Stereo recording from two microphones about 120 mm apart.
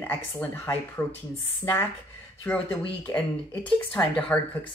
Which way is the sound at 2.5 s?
20° left (ahead or behind).